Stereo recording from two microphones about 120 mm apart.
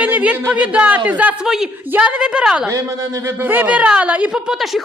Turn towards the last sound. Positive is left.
turn(degrees=-5)  # may be behind; listen again after turning